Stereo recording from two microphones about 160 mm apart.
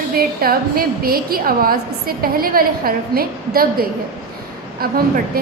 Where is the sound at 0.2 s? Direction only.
70° right (ahead or behind).